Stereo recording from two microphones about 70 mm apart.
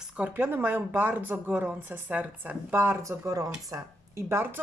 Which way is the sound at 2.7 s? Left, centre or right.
Right.